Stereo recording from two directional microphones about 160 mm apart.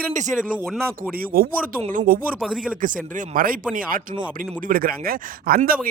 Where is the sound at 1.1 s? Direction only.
65° right (ahead or behind).